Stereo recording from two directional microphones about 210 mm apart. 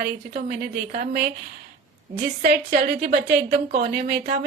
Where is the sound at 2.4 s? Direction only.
45° right (ahead or behind).